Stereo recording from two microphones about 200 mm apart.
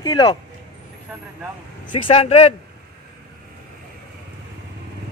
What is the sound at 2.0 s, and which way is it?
Speech, 30° left (ahead or behind).